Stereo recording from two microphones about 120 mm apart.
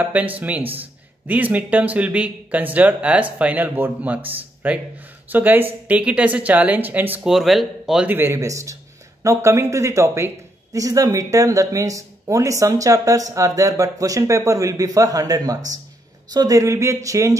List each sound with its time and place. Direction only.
0.0 s speech: 15° right (ahead or behind)
7.2 s speech: centre (ahead or behind)
8.1 s speech: 20° right (ahead or behind)